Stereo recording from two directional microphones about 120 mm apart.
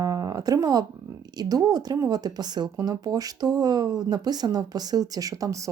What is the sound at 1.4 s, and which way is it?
Speech, 30° right (ahead or behind).